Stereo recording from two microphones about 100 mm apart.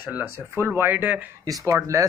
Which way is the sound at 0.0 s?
20° right (ahead or behind).